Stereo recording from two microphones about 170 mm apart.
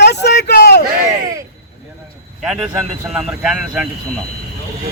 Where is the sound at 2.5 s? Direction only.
5° right (ahead or behind).